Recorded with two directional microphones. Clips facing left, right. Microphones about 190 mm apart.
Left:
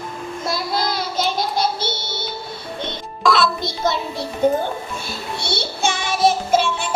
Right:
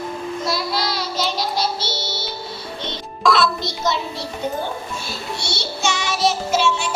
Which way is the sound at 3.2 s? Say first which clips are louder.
Even; centre (ahead or behind).